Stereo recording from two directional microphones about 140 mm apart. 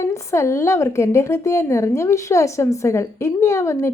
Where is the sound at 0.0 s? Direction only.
20° left (ahead or behind).